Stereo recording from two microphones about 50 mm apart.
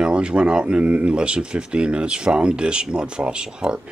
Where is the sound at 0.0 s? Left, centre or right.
Right.